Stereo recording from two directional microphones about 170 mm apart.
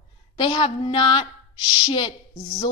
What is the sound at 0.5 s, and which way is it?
A woman's voice, 30° left (ahead or behind).